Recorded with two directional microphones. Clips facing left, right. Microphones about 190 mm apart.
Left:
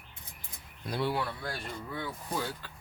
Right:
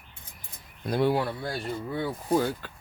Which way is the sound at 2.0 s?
50° right (ahead or behind).